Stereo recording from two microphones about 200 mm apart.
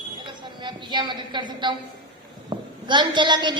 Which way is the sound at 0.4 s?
25° right (ahead or behind).